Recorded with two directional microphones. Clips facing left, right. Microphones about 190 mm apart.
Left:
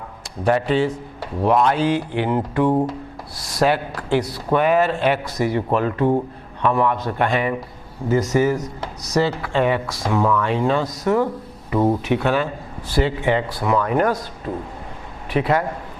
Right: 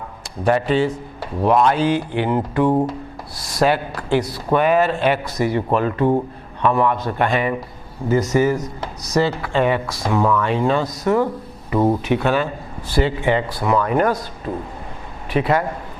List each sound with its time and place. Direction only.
0.4 s a man's voice: 15° right (ahead or behind)